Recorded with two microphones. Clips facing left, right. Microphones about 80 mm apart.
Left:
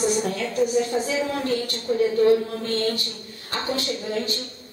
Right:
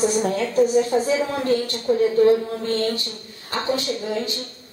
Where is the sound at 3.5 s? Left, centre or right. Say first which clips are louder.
Right 3 dB; right.